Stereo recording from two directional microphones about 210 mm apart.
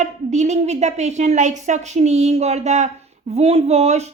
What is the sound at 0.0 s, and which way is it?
A woman's voice, 35° right (ahead or behind).